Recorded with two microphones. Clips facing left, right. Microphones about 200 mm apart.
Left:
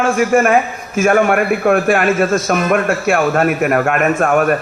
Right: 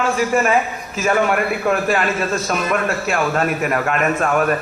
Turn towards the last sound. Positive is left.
turn(degrees=50)  # may be behind; listen again after turning